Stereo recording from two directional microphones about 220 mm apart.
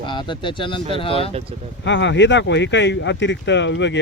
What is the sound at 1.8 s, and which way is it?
Speech, 55° left (ahead or behind).